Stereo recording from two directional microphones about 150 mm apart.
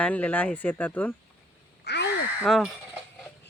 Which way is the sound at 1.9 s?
90° left.